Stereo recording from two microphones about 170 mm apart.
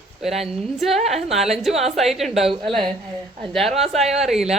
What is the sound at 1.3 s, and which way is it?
A woman's voice, centre (ahead or behind).